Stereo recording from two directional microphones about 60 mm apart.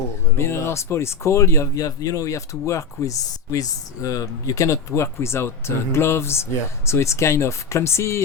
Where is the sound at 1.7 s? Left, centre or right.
Left.